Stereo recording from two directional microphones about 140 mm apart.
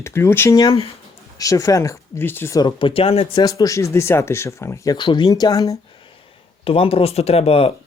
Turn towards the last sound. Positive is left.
turn(degrees=45)  # may be behind; listen again after turning